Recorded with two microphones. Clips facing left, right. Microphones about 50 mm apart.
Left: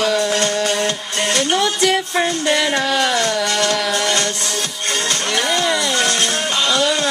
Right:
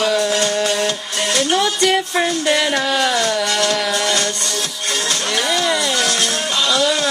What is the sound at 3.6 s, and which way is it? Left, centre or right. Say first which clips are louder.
Music: even; left.